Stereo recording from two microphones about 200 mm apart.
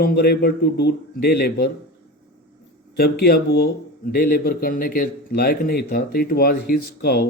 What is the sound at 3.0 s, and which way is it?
Speech, 50° left (ahead or behind).